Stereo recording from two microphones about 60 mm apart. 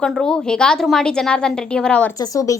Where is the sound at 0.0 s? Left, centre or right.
Centre.